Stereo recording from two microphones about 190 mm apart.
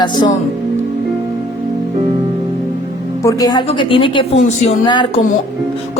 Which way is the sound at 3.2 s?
20° left (ahead or behind).